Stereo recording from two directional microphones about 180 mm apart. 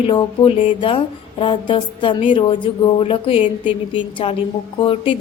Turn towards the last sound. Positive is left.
turn(degrees=30)  # may be behind; listen again after turning